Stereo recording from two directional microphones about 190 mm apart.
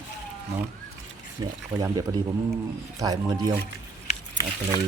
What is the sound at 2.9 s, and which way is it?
Speech, 20° right (ahead or behind).